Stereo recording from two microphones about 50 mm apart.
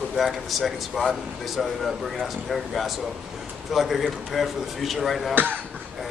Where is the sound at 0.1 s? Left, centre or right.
Centre.